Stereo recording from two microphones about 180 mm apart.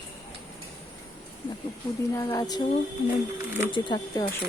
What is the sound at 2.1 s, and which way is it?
Speech, 20° left (ahead or behind).